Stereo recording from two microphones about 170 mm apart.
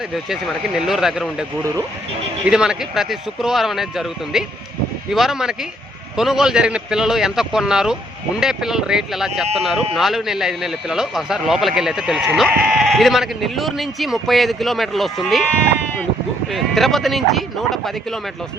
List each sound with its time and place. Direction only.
0.1 s speech: centre (ahead or behind)
2.5 s speech: 5° right (ahead or behind)
16.5 s speech: centre (ahead or behind)